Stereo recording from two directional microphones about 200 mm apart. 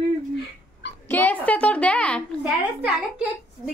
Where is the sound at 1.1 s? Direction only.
10° left (ahead or behind).